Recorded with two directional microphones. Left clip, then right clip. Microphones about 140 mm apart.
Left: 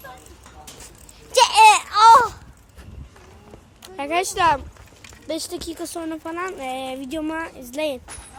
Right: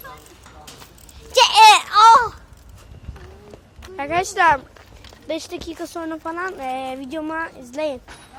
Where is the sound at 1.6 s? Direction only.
20° right (ahead or behind).